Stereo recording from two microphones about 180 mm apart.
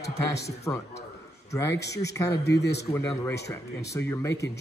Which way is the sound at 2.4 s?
70° left (ahead or behind).